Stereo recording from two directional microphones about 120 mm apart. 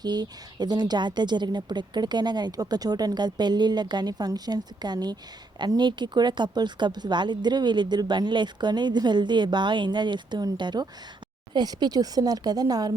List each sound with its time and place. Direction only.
0.0 s speech: 35° right (ahead or behind)